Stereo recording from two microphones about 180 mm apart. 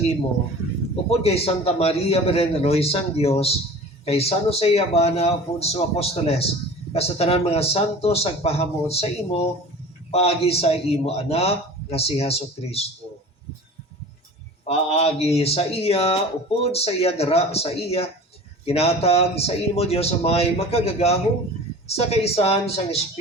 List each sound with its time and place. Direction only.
1.2 s a man's voice: 35° left (ahead or behind)
14.7 s a man's voice: 35° left (ahead or behind)